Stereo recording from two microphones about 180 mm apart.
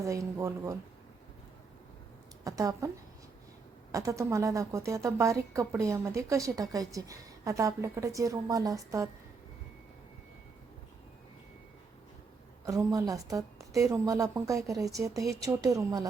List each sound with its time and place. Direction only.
0.0 s a woman's voice: 15° right (ahead or behind)
2.4 s a woman's voice: 20° right (ahead or behind)
3.9 s a woman's voice: 15° right (ahead or behind)
12.6 s a woman's voice: 15° right (ahead or behind)